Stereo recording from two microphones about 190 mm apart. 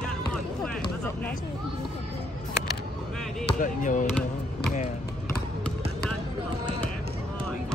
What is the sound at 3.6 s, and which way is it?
Speech, 45° left (ahead or behind).